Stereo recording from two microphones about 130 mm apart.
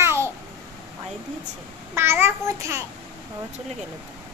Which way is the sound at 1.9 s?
20° right (ahead or behind).